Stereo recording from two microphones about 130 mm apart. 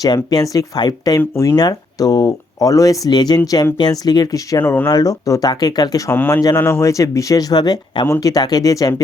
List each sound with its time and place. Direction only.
0.0 s speech: 30° left (ahead or behind)
4.6 s speech: 15° left (ahead or behind)
4.9 s speech: 30° left (ahead or behind)
6.1 s speech: 15° left (ahead or behind); by 8.0 s 35° left (ahead or behind)
8.0 s speech: 25° left (ahead or behind)